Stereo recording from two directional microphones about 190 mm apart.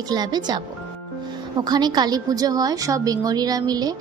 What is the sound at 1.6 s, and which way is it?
A woman's voice, 20° right (ahead or behind).